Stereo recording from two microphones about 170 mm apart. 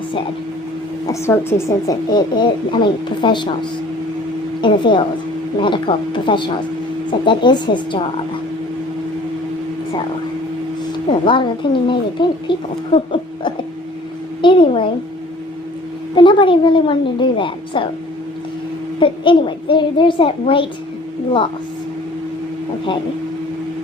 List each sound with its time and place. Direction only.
1.0 s speech: 15° left (ahead or behind)
4.6 s speech: 30° left (ahead or behind)
11.1 s speech: 30° left (ahead or behind)
16.1 s speech: 30° left (ahead or behind)
18.9 s speech: 30° left (ahead or behind)